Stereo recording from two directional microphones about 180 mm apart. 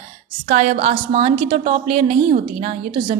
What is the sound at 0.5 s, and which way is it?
A woman's voice, 35° right (ahead or behind).